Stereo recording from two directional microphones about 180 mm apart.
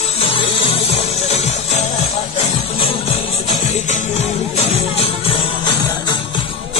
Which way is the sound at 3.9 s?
40° left (ahead or behind).